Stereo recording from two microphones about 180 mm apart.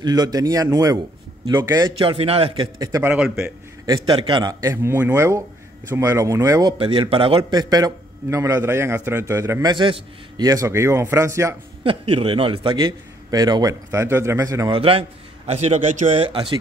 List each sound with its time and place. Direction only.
0.0 s a man's voice: 25° right (ahead or behind); by 3.5 s 5° right (ahead or behind)
3.8 s a man's voice: 20° right (ahead or behind)
6.8 s a man's voice: 30° right (ahead or behind)
11.8 s a man's voice: 30° right (ahead or behind)
14.7 s a man's voice: 30° right (ahead or behind)
16.2 s a man's voice: 30° right (ahead or behind)